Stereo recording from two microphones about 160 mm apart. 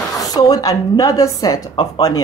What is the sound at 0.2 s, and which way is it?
A woman's voice, 20° left (ahead or behind).